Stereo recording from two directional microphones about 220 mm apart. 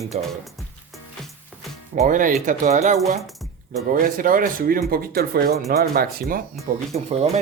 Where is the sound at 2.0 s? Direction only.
35° right (ahead or behind).